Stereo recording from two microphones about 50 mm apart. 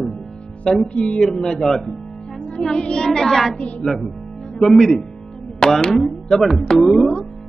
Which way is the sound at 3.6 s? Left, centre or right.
Left.